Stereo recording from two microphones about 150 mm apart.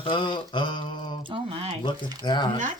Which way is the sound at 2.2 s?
30° left (ahead or behind).